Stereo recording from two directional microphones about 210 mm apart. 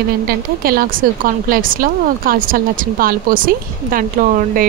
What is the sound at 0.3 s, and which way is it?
Speech, 45° right (ahead or behind).